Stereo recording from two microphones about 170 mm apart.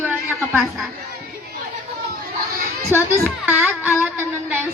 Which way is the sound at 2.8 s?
15° right (ahead or behind).